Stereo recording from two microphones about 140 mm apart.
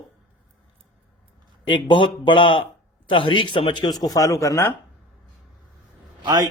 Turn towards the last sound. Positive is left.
turn(degrees=-30)  # may be behind; listen again after turning